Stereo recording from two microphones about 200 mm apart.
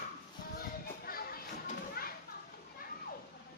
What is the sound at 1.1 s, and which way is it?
Children playing, 50° left (ahead or behind).